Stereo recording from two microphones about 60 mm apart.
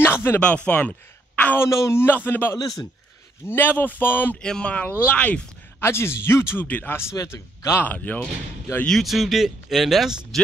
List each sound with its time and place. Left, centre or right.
0.0 s a sound: left
0.4 s speech: centre
1.6 s speech: left
2.0 s speech: left
4.4 s speech: centre
5.8 s speech: left
7.1 s a man's voice: left
7.8 s speech: left
9.0 s speech: centre